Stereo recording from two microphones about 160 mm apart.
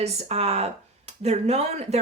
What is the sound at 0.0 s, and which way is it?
A woman's voice, 40° right (ahead or behind).